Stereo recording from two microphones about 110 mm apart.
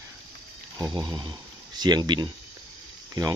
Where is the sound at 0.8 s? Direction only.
35° right (ahead or behind).